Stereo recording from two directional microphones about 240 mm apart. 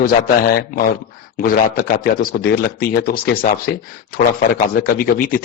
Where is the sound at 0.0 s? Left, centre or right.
Left.